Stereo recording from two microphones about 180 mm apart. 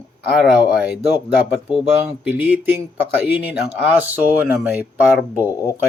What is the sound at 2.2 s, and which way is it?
Speech, 10° right (ahead or behind).